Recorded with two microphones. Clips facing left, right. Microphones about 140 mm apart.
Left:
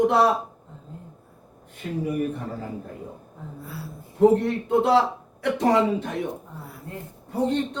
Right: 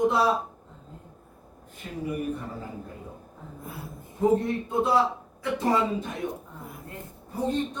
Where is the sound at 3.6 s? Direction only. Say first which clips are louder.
Left 1 dB; 20° right (ahead or behind).